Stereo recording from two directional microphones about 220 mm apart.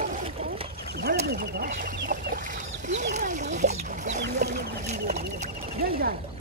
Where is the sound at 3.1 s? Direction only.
35° right (ahead or behind).